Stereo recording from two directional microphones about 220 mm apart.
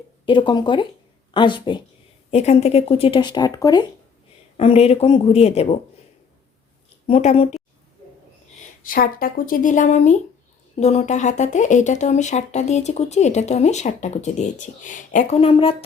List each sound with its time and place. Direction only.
0.3 s speech: 20° left (ahead or behind)
4.5 s speech: 25° left (ahead or behind)
7.1 s speech: 30° left (ahead or behind)
8.8 s speech: 40° left (ahead or behind)